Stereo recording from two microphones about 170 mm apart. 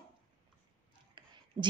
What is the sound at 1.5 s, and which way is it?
Speech, 30° right (ahead or behind).